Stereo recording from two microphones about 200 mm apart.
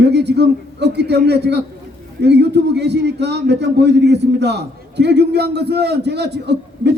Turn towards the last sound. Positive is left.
turn(degrees=-55)  # may be behind; listen again after turning